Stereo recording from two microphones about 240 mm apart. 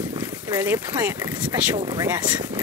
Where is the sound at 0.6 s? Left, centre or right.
Centre.